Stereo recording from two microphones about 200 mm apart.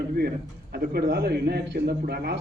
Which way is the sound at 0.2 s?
50° right (ahead or behind).